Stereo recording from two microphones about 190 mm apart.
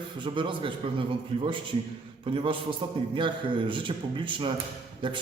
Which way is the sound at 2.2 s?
25° right (ahead or behind).